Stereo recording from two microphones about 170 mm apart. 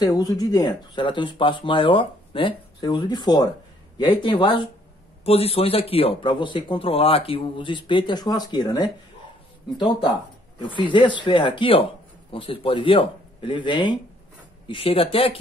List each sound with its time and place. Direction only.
0.1 s speech: 20° left (ahead or behind)